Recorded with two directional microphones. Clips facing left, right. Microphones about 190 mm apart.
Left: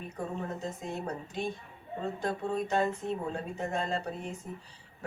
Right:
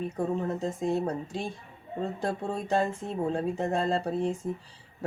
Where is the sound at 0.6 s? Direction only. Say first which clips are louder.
Right 8 dB; 30° right (ahead or behind).